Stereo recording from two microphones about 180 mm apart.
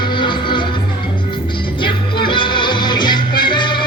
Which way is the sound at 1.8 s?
25° left (ahead or behind).